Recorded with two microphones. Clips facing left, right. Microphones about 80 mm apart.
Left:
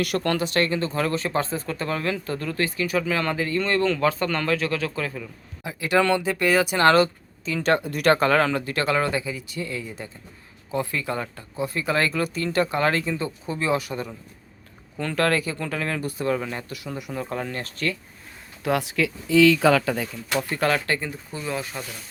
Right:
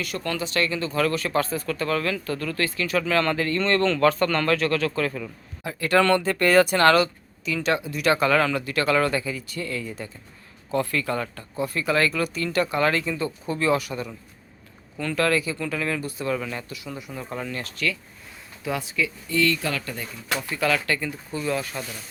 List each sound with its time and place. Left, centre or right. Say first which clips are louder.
0.0 s speech: left 5 dB; left; by 6.7 s centre
6.7 s speech: even; left
14.9 s speech: even; left
17.1 s speech: left 3 dB; left
18.6 s speech: left 4 dB; left
20.6 s speech: right 1 dB; left; by 21.8 s centre